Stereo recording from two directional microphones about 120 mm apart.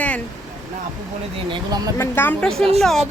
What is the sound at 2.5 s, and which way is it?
Speech, 55° right (ahead or behind).